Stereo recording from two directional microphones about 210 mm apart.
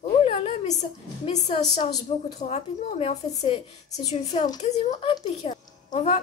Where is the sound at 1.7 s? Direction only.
30° left (ahead or behind).